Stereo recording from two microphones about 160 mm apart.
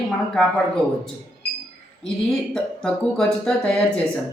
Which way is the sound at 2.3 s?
5° left (ahead or behind).